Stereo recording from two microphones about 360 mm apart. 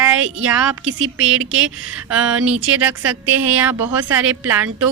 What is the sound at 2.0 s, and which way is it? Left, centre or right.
Speech, centre.